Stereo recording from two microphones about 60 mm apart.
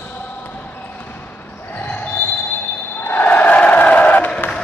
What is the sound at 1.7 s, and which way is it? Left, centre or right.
Basketball bounce, left.